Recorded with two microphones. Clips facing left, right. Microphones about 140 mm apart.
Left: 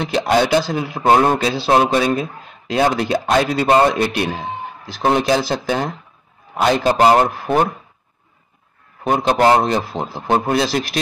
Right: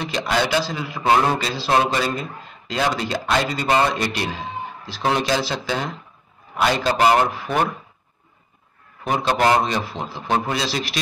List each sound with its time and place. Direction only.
0.0 s a man's voice: 60° left (ahead or behind)
7.0 s speech: 35° left (ahead or behind)
7.3 s a man's voice: 45° left (ahead or behind)
9.0 s a man's voice: 50° left (ahead or behind)
10.4 s a man's voice: 55° left (ahead or behind)